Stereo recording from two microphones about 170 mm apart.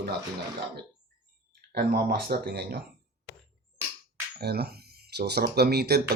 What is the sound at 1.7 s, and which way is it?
Speech, 60° right (ahead or behind).